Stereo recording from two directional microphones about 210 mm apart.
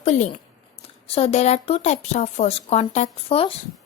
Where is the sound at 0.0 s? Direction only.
35° left (ahead or behind).